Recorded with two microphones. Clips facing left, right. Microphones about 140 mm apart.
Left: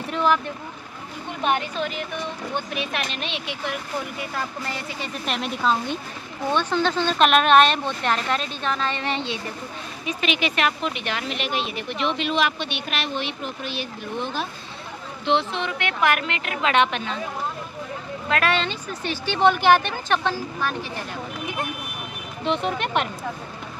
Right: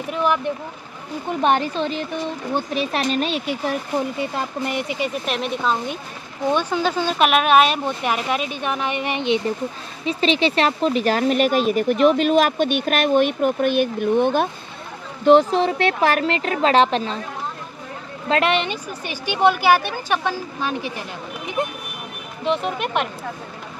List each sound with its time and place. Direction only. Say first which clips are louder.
0.1 s speech: even; 15° right (ahead or behind)
1.4 s speech: right 4 dB; 35° right (ahead or behind)
4.2 s speech: right 5 dB; 25° right (ahead or behind)
5.2 s speech: right 2 dB; centre (ahead or behind)
10.0 s speech: right 6 dB; 30° right (ahead or behind); by 14.5 s 55° right (ahead or behind)
15.2 s speech: right 9 dB; 40° right (ahead or behind)
18.3 s speech: right 4 dB; 20° right (ahead or behind)
22.4 s speech: right 2 dB; centre (ahead or behind)